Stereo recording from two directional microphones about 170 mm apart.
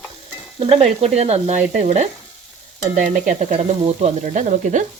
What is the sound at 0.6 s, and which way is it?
Frying, 35° right (ahead or behind).